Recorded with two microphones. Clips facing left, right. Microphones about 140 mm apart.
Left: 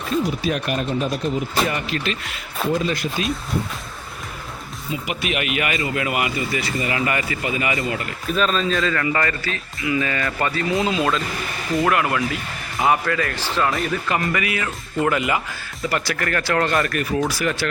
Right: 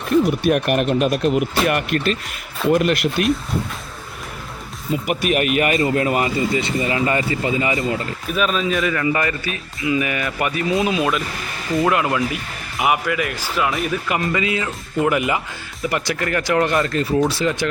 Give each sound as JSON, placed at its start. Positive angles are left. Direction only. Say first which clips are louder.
{"t": 0.1, "sound": "speech", "louder": "right 6 dB", "side_deg": -65}
{"t": 4.9, "sound": "speech", "louder": "right 6 dB", "side_deg": -45}
{"t": 8.3, "sound": "speech", "louder": "even", "side_deg": -10}
{"t": 14.1, "sound": "speech", "louder": "right 3 dB", "side_deg": -20}